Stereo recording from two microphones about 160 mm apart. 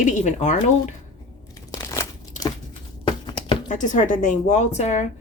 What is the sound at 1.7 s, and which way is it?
Crunch, 20° left (ahead or behind).